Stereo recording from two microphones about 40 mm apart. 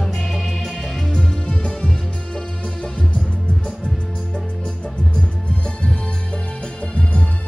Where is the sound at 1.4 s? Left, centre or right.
Left.